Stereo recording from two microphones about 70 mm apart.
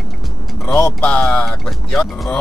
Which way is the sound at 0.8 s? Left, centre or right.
Centre.